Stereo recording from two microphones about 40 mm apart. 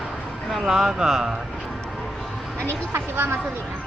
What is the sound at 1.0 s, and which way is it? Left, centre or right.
Speech, centre.